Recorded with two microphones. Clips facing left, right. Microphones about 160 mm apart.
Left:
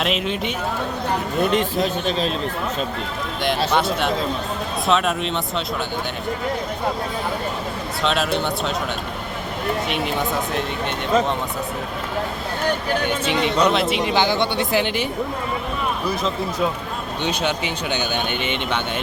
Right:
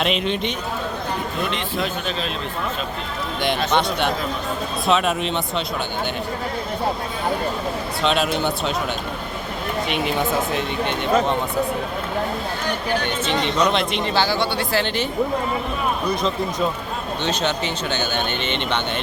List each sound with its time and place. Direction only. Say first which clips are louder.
0.0 s speech: right 1 dB; 5° left (ahead or behind)
1.5 s speech: left 5 dB; 40° left (ahead or behind)
3.7 s speech: even; 5° left (ahead or behind)
8.0 s speech: right 1 dB; centre (ahead or behind)
9.9 s speech: right 1 dB; centre (ahead or behind)
13.4 s speech: left 2 dB; 5° left (ahead or behind)
18.4 s speech: even; 10° left (ahead or behind)